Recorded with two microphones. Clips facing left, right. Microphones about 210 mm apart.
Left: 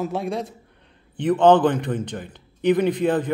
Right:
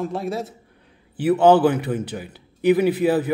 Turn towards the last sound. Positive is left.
turn(degrees=-5)  # may be behind; listen again after turning